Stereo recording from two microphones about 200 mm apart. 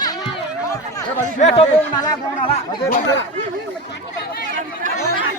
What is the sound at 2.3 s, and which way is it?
Chatter, 30° left (ahead or behind).